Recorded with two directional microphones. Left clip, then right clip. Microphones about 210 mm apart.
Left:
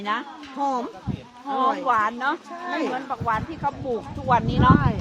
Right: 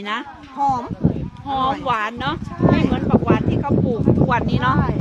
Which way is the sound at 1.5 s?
35° right (ahead or behind).